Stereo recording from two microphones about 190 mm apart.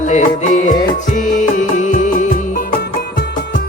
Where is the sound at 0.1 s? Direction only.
40° left (ahead or behind).